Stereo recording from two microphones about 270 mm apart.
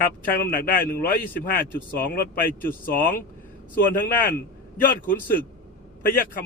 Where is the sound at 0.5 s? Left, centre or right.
Left.